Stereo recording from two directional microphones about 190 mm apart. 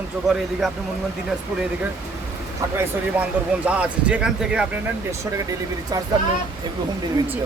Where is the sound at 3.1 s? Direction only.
5° right (ahead or behind).